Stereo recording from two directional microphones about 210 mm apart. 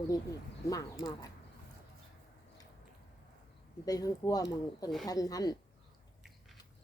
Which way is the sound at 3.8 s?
15° left (ahead or behind).